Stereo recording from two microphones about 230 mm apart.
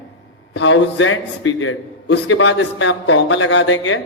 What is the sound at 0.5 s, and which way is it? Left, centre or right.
A man's voice, left.